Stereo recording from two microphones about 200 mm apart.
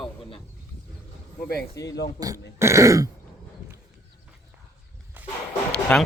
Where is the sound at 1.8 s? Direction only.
55° left (ahead or behind).